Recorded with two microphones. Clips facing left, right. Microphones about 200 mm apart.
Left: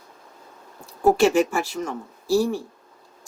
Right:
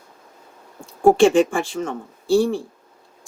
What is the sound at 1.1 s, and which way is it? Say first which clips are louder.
Speech: right 4 dB; 30° right (ahead or behind).